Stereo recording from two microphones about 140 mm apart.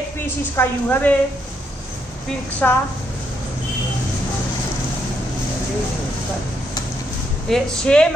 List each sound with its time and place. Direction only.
0.6 s a woman's voice: 10° left (ahead or behind)
2.6 s a woman's voice: 10° left (ahead or behind)
7.4 s speech: 5° left (ahead or behind)